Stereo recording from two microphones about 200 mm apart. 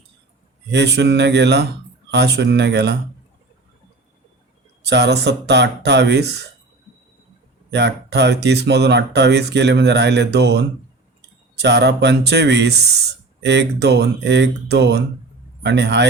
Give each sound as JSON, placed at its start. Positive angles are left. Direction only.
{"t": 0.7, "sound": "speech", "side_deg": -60}
{"t": 4.8, "sound": "speech", "side_deg": -55}
{"t": 7.7, "sound": "speech", "side_deg": -55}